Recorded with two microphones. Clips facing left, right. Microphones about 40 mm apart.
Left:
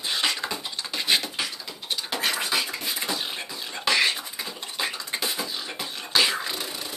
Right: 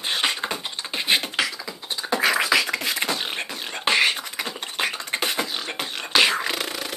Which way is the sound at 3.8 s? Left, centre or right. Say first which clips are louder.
Right 3 dB; right.